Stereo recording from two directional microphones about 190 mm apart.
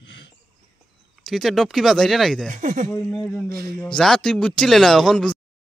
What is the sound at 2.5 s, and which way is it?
Speech, 40° right (ahead or behind).